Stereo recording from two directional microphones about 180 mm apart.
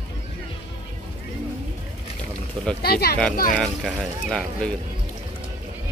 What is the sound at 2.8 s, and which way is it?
Speech, 60° left (ahead or behind).